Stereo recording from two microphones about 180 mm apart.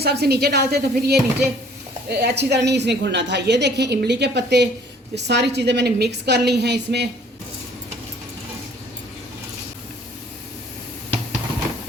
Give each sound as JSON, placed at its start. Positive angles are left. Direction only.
{"t": 0.0, "sound": "a woman's voice", "side_deg": -60}